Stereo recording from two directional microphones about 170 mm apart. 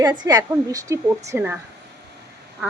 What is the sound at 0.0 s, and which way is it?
A woman's voice, 25° right (ahead or behind).